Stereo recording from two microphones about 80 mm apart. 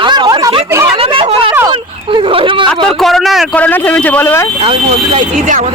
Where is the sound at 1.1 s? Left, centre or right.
Right.